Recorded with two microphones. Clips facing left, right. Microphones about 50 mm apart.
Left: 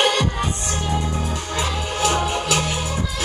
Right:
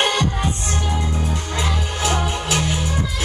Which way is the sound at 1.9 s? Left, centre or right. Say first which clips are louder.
Left 3 dB; left.